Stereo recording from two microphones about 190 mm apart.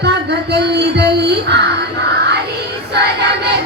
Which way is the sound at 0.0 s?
60° right (ahead or behind).